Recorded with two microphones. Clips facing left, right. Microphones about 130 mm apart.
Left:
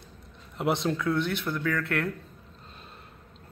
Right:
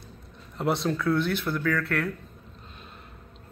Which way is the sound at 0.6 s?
20° left (ahead or behind).